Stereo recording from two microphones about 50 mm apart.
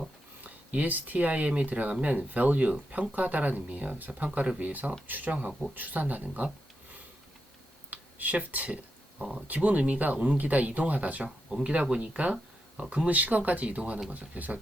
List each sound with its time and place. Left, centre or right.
0.4 s speech: right
4.4 s speech: right
4.7 s speech: right
7.9 s a sound: right
9.1 s speech: centre
9.5 s speech: right
11.4 s speech: centre
13.1 s speech: right